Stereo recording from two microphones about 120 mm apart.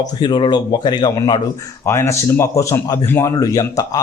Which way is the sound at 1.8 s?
25° left (ahead or behind).